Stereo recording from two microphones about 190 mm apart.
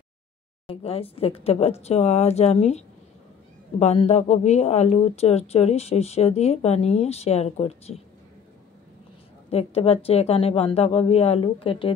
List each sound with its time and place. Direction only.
0.7 s speech: 30° left (ahead or behind)
3.8 s speech: 35° left (ahead or behind)
9.5 s speech: 30° left (ahead or behind)